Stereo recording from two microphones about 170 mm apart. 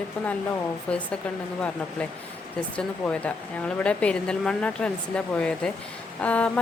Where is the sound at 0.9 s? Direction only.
5° left (ahead or behind).